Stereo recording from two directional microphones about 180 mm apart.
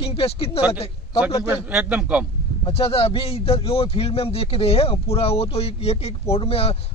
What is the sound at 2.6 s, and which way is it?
A man's voice, 30° left (ahead or behind).